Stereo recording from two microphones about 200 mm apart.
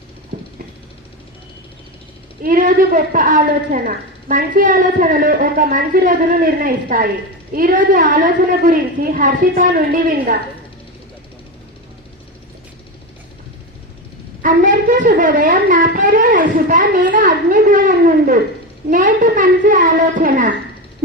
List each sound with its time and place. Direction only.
2.4 s a woman's voice: 45° right (ahead or behind)
14.4 s a woman's voice: 40° right (ahead or behind)